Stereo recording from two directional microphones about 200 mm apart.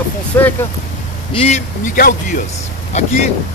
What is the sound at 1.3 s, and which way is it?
Speech, 30° left (ahead or behind).